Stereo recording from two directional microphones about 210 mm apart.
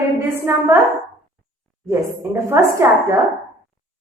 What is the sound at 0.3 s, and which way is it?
Speech, 10° right (ahead or behind).